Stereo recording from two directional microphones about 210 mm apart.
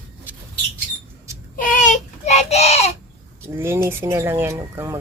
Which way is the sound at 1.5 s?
40° left (ahead or behind).